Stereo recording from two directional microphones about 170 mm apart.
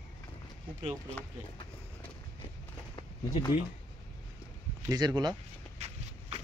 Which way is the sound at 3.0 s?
25° left (ahead or behind).